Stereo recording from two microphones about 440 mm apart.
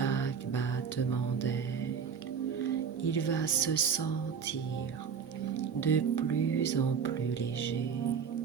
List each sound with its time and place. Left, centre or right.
0.0 s music: left
3.1 s speech: left
5.5 s music: left